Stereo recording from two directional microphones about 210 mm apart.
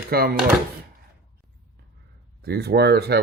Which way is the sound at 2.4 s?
50° right (ahead or behind).